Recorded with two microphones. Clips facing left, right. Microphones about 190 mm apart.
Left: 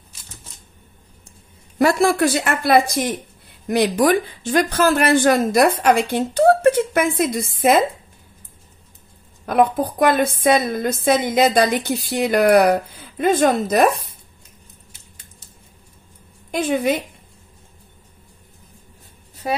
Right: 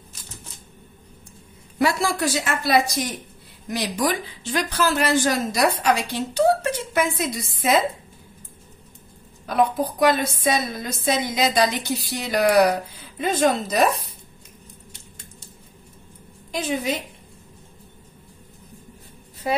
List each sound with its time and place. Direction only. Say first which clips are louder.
1.8 s a woman's voice: left 6 dB; 55° left (ahead or behind)
9.5 s a woman's voice: left 4 dB; 55° left (ahead or behind)
16.5 s speech: left 6 dB; 55° left (ahead or behind)